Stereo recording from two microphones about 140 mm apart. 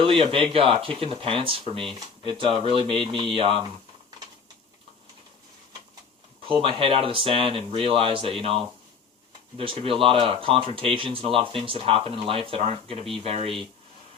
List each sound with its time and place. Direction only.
0.0 s speech: 40° right (ahead or behind)
6.4 s speech: 40° right (ahead or behind)